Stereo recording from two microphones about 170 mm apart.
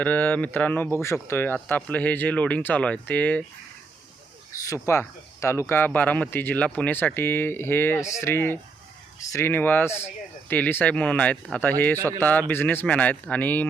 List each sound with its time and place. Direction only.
0.0 s speech: 10° left (ahead or behind)
4.6 s speech: 15° left (ahead or behind)